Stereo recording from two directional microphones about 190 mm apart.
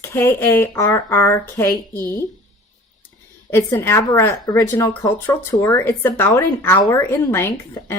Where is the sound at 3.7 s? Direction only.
15° left (ahead or behind).